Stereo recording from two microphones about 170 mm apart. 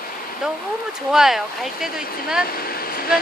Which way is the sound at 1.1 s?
Centre (ahead or behind).